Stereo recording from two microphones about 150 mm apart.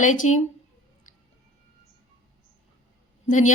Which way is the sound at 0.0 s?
55° left (ahead or behind).